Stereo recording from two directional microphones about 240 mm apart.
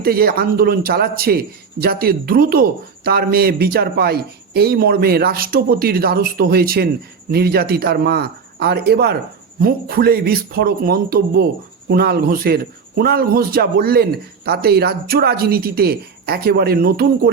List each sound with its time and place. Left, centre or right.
0.0 s a man's voice: right